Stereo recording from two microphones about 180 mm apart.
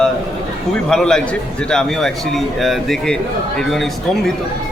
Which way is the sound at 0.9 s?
5° left (ahead or behind).